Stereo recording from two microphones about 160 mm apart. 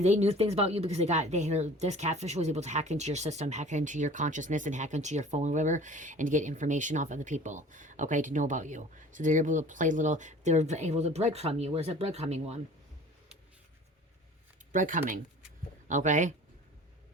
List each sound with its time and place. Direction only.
0.0 s speech: 45° right (ahead or behind)
14.7 s speech: 55° right (ahead or behind)